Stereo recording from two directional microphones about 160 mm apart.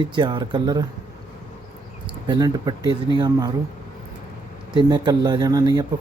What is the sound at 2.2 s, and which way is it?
Speech, 25° right (ahead or behind).